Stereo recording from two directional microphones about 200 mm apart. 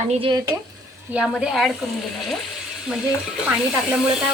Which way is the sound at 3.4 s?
5° right (ahead or behind).